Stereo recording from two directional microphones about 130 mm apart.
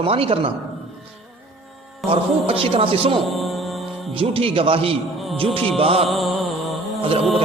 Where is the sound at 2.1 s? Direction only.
45° right (ahead or behind).